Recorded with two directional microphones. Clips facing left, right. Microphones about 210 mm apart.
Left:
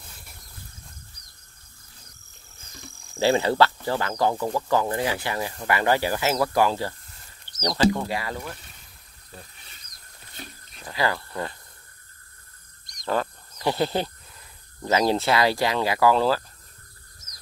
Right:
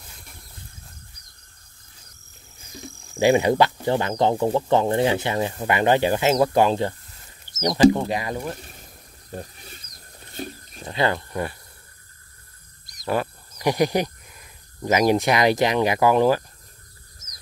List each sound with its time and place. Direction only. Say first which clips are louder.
2.7 s cricket: right 6 dB; 15° right (ahead or behind)
3.7 s speech: right 4 dB; 20° right (ahead or behind)
9.3 s a sound: right 11 dB; 45° right (ahead or behind)
10.8 s speech: right 3 dB; 25° right (ahead or behind)
12.8 s speech: right 2 dB; 5° right (ahead or behind)